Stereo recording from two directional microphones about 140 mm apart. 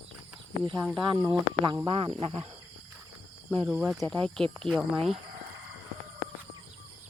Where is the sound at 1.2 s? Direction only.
25° right (ahead or behind).